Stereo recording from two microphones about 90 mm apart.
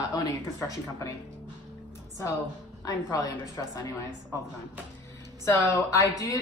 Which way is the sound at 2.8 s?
45° left (ahead or behind).